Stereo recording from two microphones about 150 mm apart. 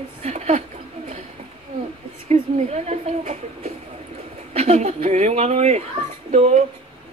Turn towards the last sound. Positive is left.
turn(degrees=-45)  # may be behind; listen again after turning